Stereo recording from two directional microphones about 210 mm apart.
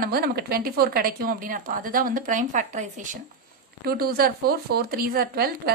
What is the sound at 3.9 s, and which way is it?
A woman's voice, 45° right (ahead or behind).